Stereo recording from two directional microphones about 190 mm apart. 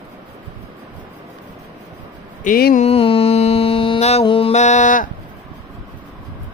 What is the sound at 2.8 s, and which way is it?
Mantra, 30° left (ahead or behind).